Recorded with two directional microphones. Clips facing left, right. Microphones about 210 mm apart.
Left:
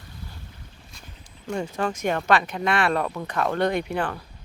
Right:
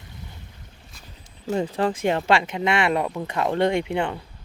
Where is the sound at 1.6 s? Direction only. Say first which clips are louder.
Right 2 dB; 30° right (ahead or behind).